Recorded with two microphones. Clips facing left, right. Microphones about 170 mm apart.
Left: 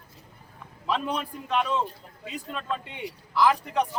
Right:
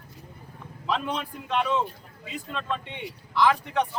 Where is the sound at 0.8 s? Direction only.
5° left (ahead or behind).